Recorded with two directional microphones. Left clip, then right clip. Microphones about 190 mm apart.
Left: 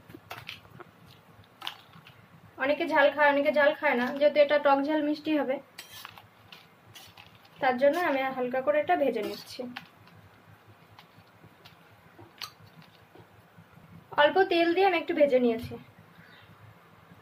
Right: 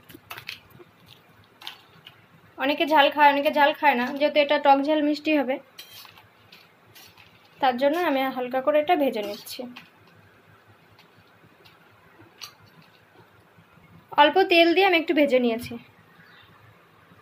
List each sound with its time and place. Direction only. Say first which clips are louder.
2.5 s a woman's voice: right 5 dB; 15° right (ahead or behind)
7.6 s a woman's voice: right 3 dB; 10° right (ahead or behind)
14.1 s a woman's voice: right 6 dB; 20° right (ahead or behind)